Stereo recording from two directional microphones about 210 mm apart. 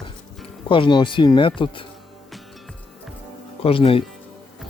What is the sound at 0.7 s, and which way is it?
Speech, 25° left (ahead or behind).